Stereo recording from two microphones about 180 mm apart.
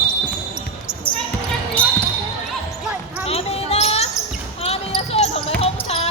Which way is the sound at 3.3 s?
35° left (ahead or behind).